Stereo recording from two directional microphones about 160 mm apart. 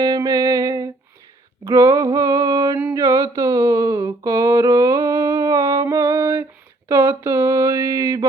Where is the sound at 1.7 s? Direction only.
15° right (ahead or behind).